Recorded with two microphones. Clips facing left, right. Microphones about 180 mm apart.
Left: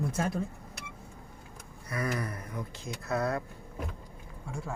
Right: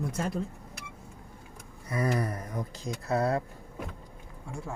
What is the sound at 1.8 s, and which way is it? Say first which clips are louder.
Speech: right 4 dB; 30° right (ahead or behind).